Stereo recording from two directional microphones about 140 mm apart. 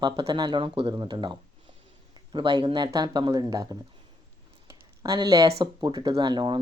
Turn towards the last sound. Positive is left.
turn(degrees=-35)  # may be behind; listen again after turning